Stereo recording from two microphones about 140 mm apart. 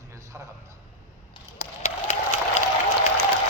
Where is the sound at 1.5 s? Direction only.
55° left (ahead or behind).